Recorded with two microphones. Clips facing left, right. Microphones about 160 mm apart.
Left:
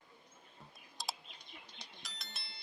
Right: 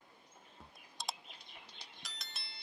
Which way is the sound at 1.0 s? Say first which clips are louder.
Even; centre (ahead or behind).